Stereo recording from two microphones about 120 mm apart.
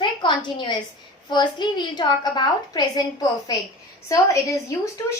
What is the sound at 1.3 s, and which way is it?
A woman's voice, 40° left (ahead or behind).